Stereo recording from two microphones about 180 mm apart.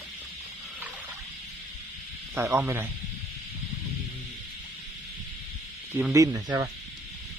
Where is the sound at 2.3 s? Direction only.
15° right (ahead or behind).